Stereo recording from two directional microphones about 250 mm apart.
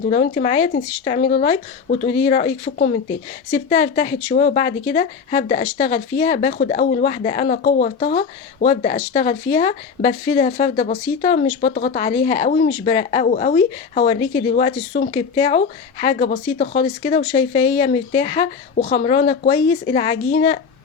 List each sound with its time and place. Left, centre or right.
0.0 s speech: left
3.5 s speech: left